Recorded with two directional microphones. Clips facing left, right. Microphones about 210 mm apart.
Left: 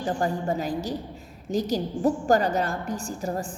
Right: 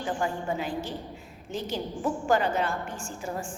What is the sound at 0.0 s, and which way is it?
A woman's voice, 40° left (ahead or behind).